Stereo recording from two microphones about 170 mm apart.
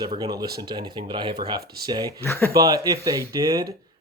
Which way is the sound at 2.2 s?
15° left (ahead or behind).